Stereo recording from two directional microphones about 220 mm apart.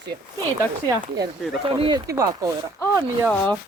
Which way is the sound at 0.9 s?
15° right (ahead or behind).